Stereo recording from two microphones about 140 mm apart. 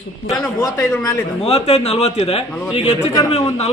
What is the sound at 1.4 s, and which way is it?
A man's voice, 50° left (ahead or behind).